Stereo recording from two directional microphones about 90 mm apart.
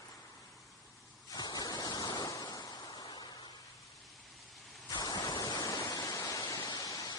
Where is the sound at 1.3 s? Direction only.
45° left (ahead or behind).